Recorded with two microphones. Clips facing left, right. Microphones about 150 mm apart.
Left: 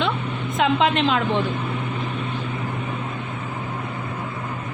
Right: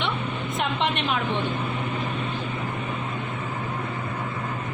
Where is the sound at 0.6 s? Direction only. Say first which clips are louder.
Left 8 dB; 90° left.